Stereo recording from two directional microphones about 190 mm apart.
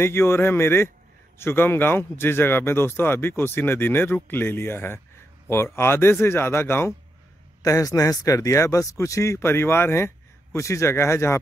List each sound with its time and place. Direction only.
0.0 s speech: 10° left (ahead or behind)